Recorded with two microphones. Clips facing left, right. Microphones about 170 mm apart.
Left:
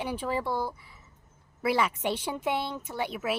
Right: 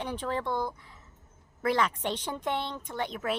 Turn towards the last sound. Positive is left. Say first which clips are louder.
# left 1 dB
turn(degrees=5)  # may be behind; listen again after turning